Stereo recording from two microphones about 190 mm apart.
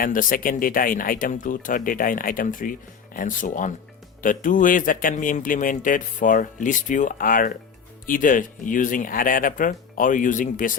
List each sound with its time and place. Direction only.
0.0 s speech: 45° left (ahead or behind)